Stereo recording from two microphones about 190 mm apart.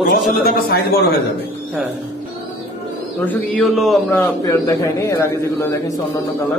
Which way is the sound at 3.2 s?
5° left (ahead or behind).